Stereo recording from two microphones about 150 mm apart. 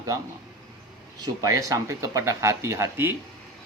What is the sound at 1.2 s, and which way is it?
Speech, 20° right (ahead or behind).